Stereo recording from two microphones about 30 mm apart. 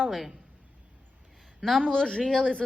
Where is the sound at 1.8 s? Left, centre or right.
Left.